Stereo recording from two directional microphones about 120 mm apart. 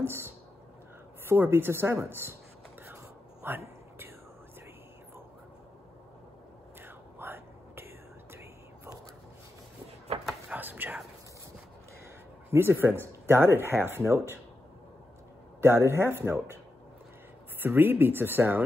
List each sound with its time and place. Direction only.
0.0 s speech: 20° right (ahead or behind)
3.4 s a sound: 20° right (ahead or behind)
6.8 s whispering: 20° right (ahead or behind)
10.5 s whispering: 15° right (ahead or behind)
12.4 s speech: 20° right (ahead or behind)
15.6 s speech: 20° right (ahead or behind)
17.6 s speech: 15° right (ahead or behind)